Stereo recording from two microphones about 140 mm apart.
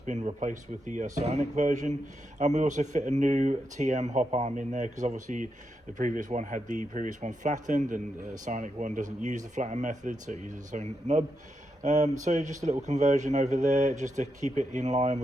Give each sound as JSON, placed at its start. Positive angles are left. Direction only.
{"t": 0.0, "sound": "speech", "side_deg": -55}